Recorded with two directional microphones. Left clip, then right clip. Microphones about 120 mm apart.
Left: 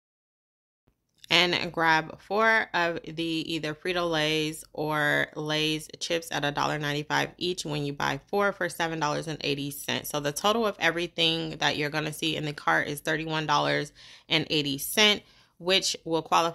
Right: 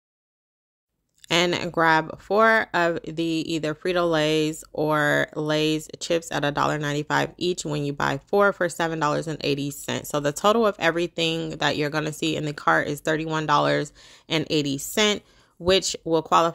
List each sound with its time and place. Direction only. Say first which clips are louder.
1.3 s speech: right 1 dB; 45° right (ahead or behind)